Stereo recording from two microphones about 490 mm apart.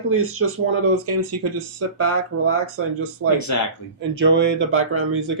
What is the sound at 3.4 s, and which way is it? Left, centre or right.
Speech, left.